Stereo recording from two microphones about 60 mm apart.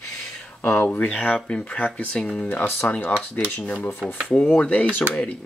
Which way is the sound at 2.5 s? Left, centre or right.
Left.